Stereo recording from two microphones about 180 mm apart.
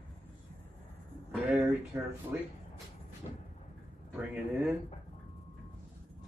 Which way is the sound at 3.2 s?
30° left (ahead or behind).